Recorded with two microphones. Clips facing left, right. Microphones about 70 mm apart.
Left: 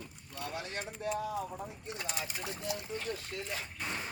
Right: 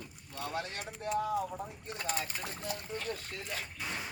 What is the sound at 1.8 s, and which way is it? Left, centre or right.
Speech, right.